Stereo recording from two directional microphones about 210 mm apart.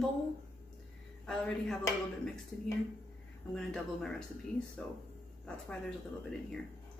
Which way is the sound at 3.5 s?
5° left (ahead or behind).